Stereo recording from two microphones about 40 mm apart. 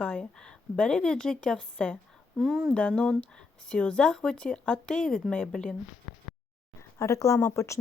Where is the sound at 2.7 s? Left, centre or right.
Left.